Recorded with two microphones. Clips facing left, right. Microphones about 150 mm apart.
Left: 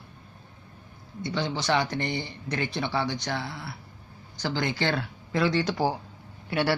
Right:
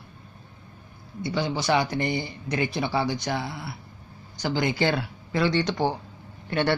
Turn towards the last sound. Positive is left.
turn(degrees=10)  # may be behind; listen again after turning